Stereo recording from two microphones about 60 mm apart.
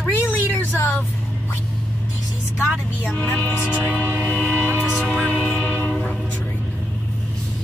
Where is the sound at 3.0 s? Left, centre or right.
Left.